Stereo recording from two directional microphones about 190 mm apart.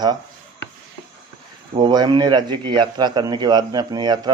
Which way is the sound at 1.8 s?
20° right (ahead or behind).